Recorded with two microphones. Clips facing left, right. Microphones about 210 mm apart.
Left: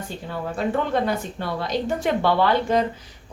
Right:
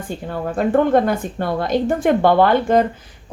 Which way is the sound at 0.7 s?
50° right (ahead or behind).